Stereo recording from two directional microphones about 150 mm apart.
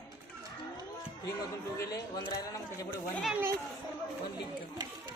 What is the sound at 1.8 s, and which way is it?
Speech, 25° left (ahead or behind).